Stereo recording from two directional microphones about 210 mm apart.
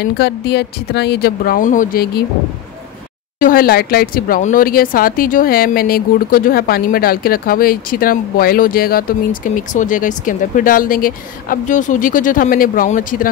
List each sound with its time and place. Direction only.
0.0 s speech: 50° left (ahead or behind)
3.3 s speech: 40° left (ahead or behind)